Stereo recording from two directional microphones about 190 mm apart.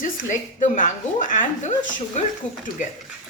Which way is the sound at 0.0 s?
40° left (ahead or behind).